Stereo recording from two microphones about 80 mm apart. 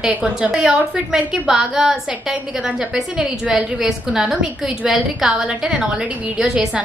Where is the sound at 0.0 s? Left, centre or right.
Centre.